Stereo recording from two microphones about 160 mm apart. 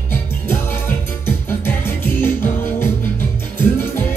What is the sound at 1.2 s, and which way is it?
Music, 15° left (ahead or behind).